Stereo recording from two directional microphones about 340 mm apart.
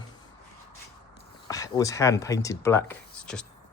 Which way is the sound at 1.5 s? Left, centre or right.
Centre.